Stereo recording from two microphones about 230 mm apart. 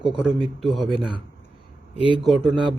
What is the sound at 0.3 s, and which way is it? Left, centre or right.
Speech, centre.